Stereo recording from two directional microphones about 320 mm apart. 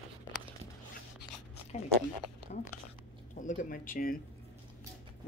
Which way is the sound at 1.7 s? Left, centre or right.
Centre.